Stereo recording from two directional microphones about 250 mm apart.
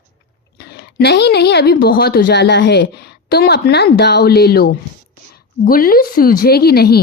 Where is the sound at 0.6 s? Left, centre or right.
Left.